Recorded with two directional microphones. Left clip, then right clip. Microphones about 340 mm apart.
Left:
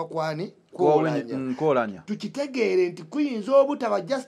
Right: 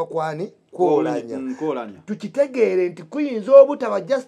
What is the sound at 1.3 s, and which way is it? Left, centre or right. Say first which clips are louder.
Speech: left 2 dB; left.